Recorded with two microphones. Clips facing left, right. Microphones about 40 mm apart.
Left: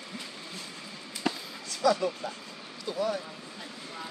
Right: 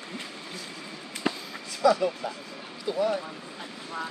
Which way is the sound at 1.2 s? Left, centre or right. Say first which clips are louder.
Right 2 dB; centre.